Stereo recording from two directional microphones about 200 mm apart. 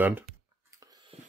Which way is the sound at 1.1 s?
30° right (ahead or behind).